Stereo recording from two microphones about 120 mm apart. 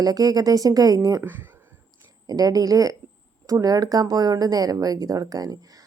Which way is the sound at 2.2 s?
30° right (ahead or behind).